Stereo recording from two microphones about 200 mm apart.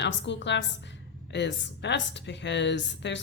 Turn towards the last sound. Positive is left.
turn(degrees=60)  # may be behind; listen again after turning